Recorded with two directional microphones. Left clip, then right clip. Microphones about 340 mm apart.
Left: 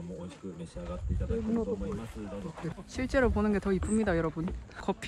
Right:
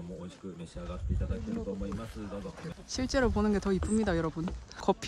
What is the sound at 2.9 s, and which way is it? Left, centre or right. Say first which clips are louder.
Speech: left 1 dB; centre.